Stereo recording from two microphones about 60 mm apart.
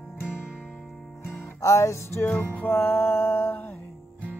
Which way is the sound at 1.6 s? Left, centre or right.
Left.